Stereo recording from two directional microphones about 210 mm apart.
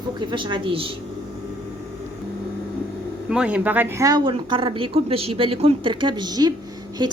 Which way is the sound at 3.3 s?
5° right (ahead or behind).